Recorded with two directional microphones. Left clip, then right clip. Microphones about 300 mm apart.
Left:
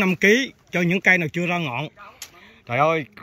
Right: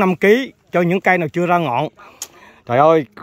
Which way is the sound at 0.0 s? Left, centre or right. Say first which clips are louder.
Right 4 dB; centre.